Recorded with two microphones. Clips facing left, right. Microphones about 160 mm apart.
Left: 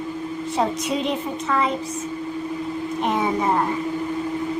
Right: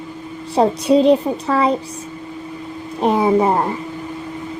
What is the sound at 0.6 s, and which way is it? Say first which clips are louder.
A woman's voice: right 10 dB; 35° right (ahead or behind).